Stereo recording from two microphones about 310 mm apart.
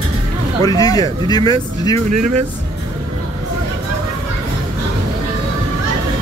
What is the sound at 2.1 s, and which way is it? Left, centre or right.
Speech, right.